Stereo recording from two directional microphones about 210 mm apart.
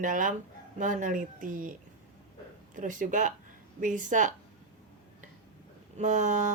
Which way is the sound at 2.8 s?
40° right (ahead or behind).